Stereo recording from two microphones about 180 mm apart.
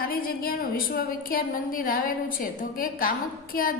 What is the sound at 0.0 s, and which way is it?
A woman's voice, 55° left (ahead or behind).